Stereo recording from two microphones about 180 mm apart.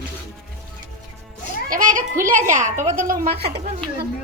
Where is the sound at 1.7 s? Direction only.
50° right (ahead or behind).